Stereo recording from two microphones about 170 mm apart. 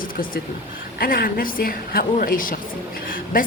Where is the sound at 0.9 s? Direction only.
60° left (ahead or behind).